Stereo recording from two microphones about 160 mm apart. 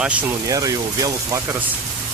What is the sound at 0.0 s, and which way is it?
Speech, 10° right (ahead or behind).